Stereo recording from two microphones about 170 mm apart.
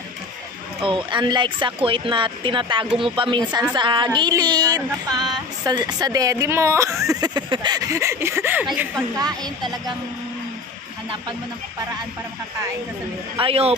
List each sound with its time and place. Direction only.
0.8 s a woman's voice: 30° right (ahead or behind); by 8.6 s 15° right (ahead or behind)
9.1 s speech: 25° right (ahead or behind)
13.4 s a woman's voice: 35° right (ahead or behind)